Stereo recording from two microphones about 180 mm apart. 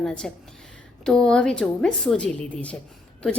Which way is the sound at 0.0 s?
5° left (ahead or behind).